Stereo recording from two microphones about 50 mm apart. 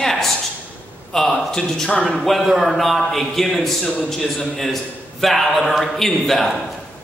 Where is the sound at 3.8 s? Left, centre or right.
Centre.